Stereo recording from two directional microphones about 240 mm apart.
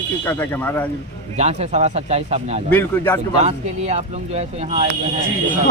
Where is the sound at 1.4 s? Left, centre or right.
Right.